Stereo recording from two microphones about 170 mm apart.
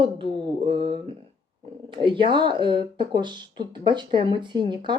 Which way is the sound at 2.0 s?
30° right (ahead or behind).